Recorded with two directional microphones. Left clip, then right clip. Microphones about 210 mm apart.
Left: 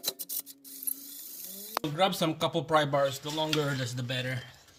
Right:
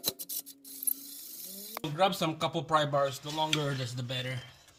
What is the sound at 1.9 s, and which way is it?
Speech, 30° left (ahead or behind).